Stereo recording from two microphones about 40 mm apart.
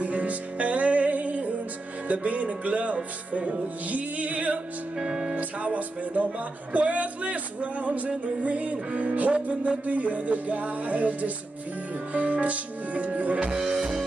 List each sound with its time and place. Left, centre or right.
0.0 s music: right
4.9 s speech: right
5.3 s music: right
13.5 s music: centre